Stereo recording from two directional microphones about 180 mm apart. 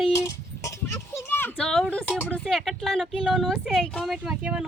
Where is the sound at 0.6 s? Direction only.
15° left (ahead or behind).